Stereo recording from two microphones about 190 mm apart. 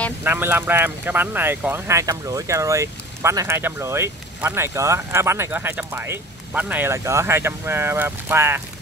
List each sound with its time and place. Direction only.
0.2 s speech: 10° right (ahead or behind)